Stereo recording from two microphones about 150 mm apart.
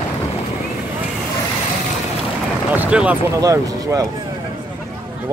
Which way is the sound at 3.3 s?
20° right (ahead or behind).